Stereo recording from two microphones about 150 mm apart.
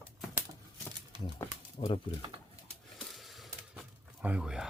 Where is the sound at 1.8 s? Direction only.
40° left (ahead or behind).